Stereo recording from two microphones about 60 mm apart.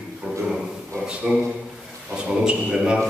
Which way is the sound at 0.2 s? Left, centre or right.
Right.